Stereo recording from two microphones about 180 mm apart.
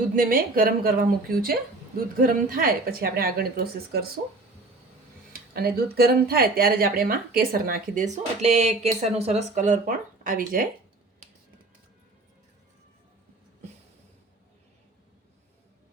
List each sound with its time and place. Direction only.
0.2 s a woman's voice: 50° right (ahead or behind)
5.3 s speech: 60° right (ahead or behind)